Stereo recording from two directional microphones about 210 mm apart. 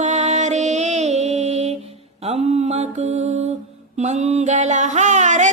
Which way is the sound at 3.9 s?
35° right (ahead or behind).